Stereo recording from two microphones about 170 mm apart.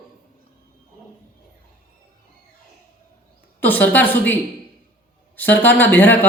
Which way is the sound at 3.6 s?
10° left (ahead or behind).